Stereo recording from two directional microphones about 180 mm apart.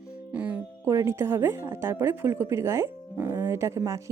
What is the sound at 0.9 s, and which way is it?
Speech, 15° right (ahead or behind).